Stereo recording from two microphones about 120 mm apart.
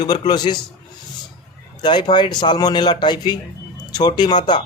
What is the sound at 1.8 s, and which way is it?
Speech, 35° left (ahead or behind).